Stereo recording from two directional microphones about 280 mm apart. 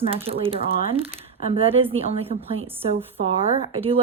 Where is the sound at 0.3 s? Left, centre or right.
Right.